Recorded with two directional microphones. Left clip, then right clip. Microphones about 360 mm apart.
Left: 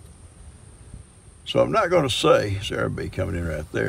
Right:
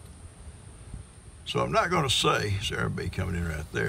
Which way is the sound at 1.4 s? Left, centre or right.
Centre.